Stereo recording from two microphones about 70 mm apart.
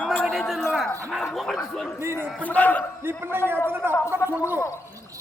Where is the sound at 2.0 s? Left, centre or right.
Right.